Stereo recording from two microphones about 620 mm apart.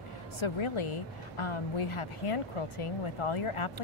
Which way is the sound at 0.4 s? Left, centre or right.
Left.